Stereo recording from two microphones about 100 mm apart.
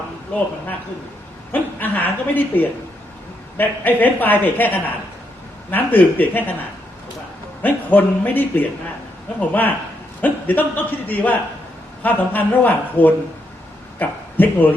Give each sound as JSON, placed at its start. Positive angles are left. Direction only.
{"t": 1.5, "sound": "a man's voice", "side_deg": 15}
{"t": 7.6, "sound": "a woman's voice", "side_deg": 20}